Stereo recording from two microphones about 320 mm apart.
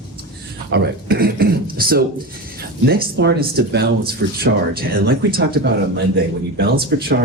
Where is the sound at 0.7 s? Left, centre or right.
Right.